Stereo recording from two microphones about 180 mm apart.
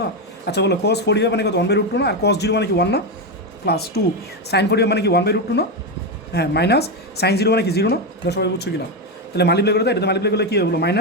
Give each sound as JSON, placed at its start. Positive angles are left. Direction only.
{"t": 0.0, "sound": "speech", "side_deg": 65}